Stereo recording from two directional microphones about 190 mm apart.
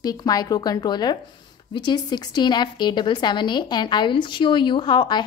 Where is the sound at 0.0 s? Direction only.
20° left (ahead or behind).